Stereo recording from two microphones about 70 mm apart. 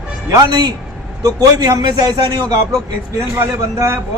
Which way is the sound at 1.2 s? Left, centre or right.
Right.